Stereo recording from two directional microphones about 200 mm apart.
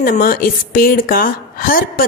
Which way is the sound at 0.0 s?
45° left (ahead or behind).